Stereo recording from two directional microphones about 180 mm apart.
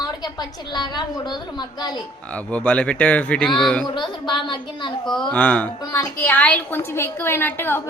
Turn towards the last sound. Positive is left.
turn(degrees=10)  # may be behind; listen again after turning